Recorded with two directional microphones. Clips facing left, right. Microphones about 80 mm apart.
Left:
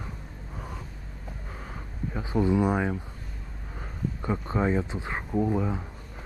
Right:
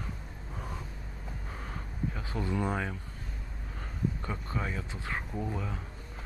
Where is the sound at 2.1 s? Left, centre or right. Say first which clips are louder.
Left 11 dB; centre.